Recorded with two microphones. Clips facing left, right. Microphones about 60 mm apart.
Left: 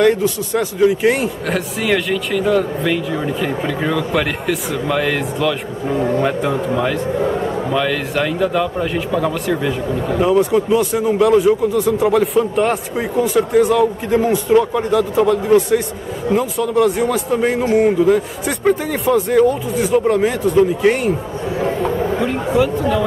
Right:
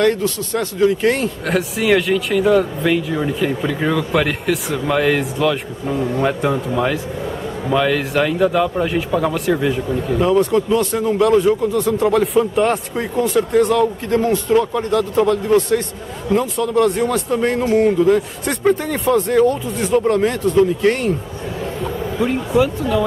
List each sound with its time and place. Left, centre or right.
0.0 s speech: centre
1.5 s speech: centre
5.9 s speech: centre
10.2 s speech: centre
21.5 s a sound: left
22.2 s speech: centre